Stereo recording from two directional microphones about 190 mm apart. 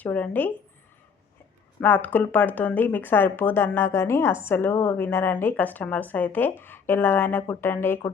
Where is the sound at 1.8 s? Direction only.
10° left (ahead or behind).